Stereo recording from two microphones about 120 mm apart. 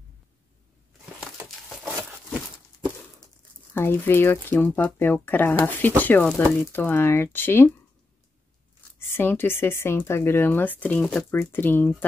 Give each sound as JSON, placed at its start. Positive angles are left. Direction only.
{"t": 3.7, "sound": "speech", "side_deg": 20}
{"t": 9.0, "sound": "speech", "side_deg": 20}